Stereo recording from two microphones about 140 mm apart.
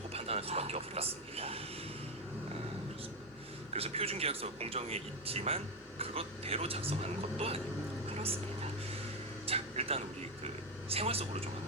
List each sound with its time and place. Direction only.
0.1 s speech: 45° right (ahead or behind)
3.7 s speech: 45° right (ahead or behind)
9.5 s a sound: 45° right (ahead or behind)